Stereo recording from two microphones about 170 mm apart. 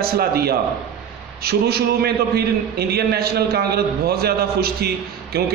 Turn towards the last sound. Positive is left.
turn(degrees=-65)  # may be behind; listen again after turning